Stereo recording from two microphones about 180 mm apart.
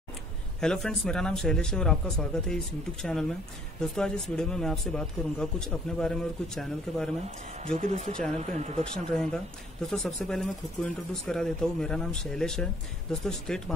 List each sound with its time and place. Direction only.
0.6 s speech: 5° left (ahead or behind)
7.8 s speech: 40° right (ahead or behind)
8.9 s speech: 5° left (ahead or behind)